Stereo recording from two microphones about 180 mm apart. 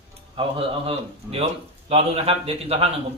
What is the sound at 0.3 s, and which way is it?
A man's voice, 30° right (ahead or behind).